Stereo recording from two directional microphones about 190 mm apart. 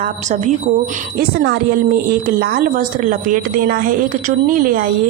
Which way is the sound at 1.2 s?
55° right (ahead or behind).